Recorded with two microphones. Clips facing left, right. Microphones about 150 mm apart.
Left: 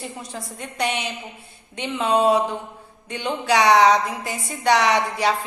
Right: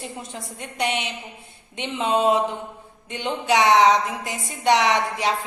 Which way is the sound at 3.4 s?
20° right (ahead or behind).